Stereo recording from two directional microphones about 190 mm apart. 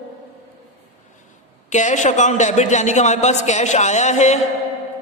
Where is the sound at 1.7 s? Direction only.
40° left (ahead or behind).